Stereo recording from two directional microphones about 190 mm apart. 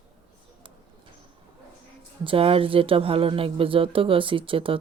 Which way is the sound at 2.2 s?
30° right (ahead or behind).